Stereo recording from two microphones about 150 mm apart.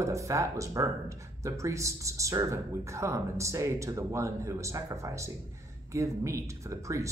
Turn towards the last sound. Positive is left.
turn(degrees=-20)  # may be behind; listen again after turning